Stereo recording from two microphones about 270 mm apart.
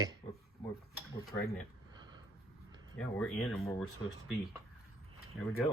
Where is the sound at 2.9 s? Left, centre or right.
Centre.